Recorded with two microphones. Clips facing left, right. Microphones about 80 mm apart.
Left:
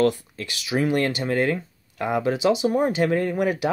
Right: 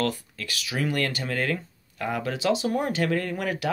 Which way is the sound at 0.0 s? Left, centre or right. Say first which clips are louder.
Left 7 dB; left.